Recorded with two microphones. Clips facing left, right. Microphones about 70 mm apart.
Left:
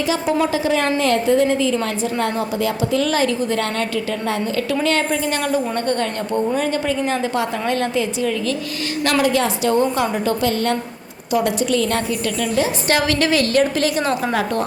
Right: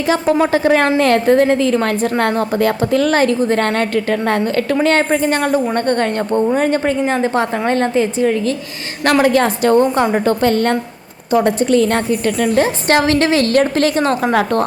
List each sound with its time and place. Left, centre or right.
0.1 s a woman's voice: right
13.5 s a woman's voice: right